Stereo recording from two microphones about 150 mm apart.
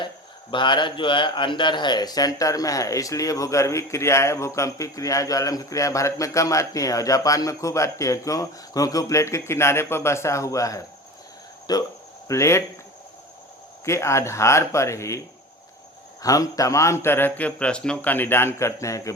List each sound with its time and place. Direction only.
0.5 s a man's voice: 30° left (ahead or behind)
13.8 s a man's voice: 20° left (ahead or behind)
16.2 s a man's voice: 25° left (ahead or behind)